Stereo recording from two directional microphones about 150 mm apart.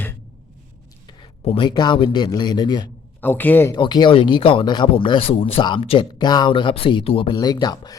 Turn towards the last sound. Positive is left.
turn(degrees=25)  # may be behind; listen again after turning